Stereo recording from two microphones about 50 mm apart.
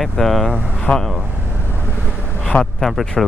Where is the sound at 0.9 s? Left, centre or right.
Centre.